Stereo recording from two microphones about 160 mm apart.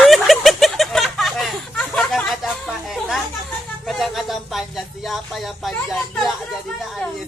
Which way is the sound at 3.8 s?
Centre (ahead or behind).